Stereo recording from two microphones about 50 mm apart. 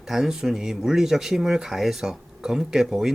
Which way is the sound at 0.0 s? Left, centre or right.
Centre.